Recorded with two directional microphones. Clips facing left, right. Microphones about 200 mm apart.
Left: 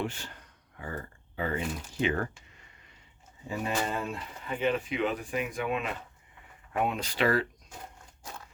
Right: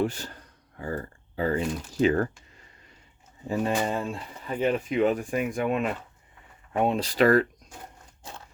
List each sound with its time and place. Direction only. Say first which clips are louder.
0.0 s speech: right 7 dB; 40° right (ahead or behind)
1.4 s speech: right 6 dB; 35° right (ahead or behind)
3.4 s speech: right 7 dB; 40° right (ahead or behind)
3.8 s speech: right 4 dB; 25° right (ahead or behind)
4.6 s speech: right 5 dB; 45° right (ahead or behind)
6.7 s speech: right 6 dB; 30° right (ahead or behind)